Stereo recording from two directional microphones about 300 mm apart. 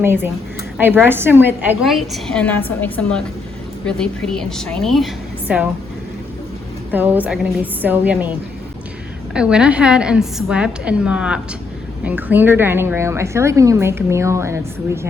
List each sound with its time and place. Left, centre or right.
0.0 s a woman's voice: centre
6.9 s a woman's voice: centre